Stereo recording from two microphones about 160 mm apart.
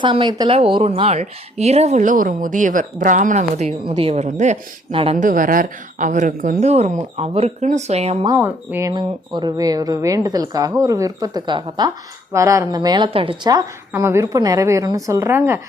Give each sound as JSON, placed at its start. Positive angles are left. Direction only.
{"t": 0.0, "sound": "speech", "side_deg": -30}
{"t": 3.8, "sound": "a woman's voice", "side_deg": -35}
{"t": 5.1, "sound": "speech", "side_deg": -55}
{"t": 8.4, "sound": "speech", "side_deg": -15}
{"t": 8.9, "sound": "a woman's voice", "side_deg": -25}
{"t": 12.3, "sound": "a woman's voice", "side_deg": -20}